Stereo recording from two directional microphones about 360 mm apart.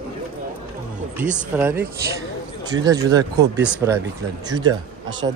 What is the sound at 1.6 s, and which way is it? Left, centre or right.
Speech, centre.